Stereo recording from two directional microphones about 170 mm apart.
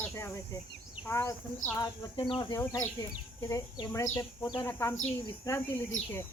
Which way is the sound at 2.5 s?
15° left (ahead or behind).